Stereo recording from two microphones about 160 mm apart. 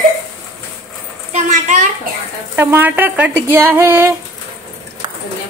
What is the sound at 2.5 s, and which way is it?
Speech, 15° right (ahead or behind).